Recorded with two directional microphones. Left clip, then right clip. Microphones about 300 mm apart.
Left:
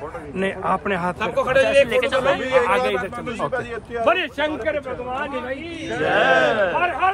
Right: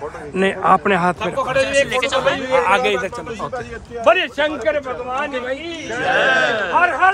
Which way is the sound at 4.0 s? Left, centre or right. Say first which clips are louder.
Right 5 dB; right.